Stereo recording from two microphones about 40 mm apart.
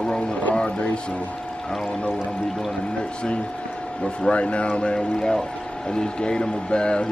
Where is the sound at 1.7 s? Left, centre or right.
Centre.